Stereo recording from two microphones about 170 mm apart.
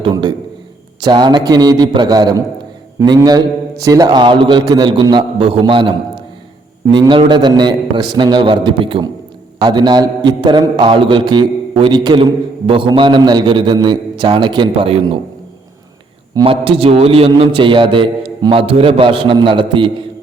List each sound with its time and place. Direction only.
0.0 s a sound: 25° right (ahead or behind)
1.0 s a man's voice: 25° right (ahead or behind)
16.3 s a man's voice: 30° right (ahead or behind)